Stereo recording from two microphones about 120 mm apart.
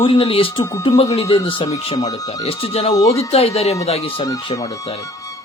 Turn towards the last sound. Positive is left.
turn(degrees=35)  # may be behind; listen again after turning